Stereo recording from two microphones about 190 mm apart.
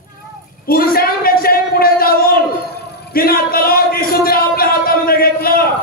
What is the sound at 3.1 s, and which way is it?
A man's voice, 50° left (ahead or behind).